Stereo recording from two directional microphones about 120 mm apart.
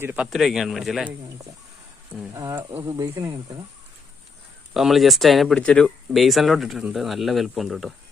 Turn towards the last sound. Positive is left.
turn(degrees=0)  # may be behind; listen again after turning